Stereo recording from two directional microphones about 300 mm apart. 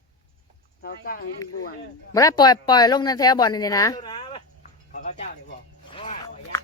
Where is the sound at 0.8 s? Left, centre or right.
Left.